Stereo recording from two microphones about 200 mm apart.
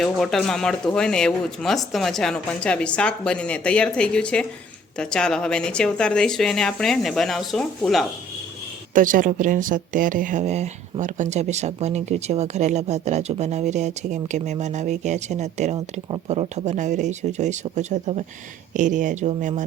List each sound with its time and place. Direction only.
0.0 s speech: centre (ahead or behind)
9.0 s speech: 45° right (ahead or behind)